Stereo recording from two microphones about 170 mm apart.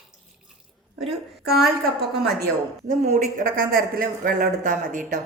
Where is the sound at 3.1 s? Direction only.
50° right (ahead or behind).